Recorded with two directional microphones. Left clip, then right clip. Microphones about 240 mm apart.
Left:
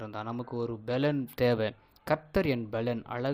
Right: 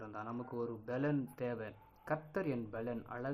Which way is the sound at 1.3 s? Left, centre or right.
Left.